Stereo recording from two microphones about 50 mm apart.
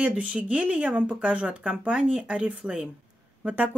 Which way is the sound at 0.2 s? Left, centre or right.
Right.